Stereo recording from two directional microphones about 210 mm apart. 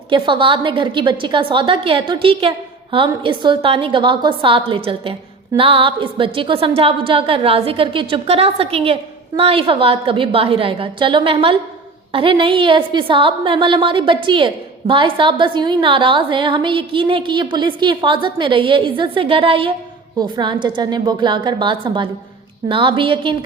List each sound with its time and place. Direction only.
0.1 s a woman's voice: 25° right (ahead or behind)